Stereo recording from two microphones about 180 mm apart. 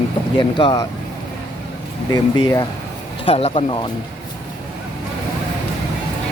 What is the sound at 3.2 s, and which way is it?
Speech, 35° left (ahead or behind).